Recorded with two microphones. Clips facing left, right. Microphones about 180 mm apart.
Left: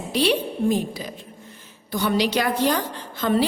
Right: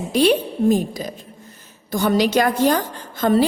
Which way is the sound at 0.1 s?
45° right (ahead or behind).